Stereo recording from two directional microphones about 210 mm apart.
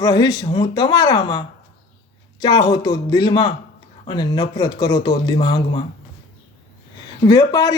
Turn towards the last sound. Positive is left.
turn(degrees=15)  # may be behind; listen again after turning